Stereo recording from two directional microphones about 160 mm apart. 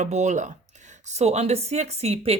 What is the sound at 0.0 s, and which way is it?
A woman's voice, 45° right (ahead or behind).